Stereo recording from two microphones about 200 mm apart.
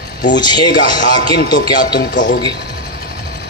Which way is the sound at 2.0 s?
40° left (ahead or behind).